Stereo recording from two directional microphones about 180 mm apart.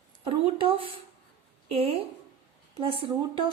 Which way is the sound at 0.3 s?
30° right (ahead or behind).